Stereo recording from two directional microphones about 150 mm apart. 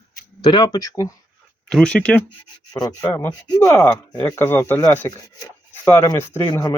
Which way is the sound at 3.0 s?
15° left (ahead or behind).